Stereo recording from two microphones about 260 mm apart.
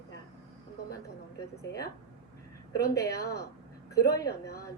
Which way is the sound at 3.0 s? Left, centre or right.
Left.